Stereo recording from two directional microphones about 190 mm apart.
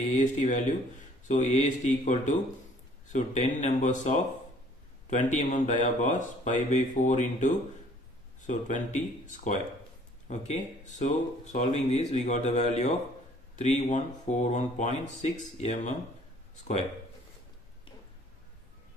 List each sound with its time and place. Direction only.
0.1 s speech: 40° left (ahead or behind)